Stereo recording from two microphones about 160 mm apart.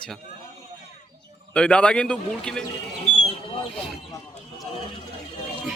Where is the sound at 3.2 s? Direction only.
40° left (ahead or behind).